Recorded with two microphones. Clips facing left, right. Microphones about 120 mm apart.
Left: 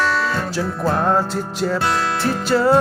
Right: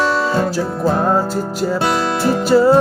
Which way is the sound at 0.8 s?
10° right (ahead or behind).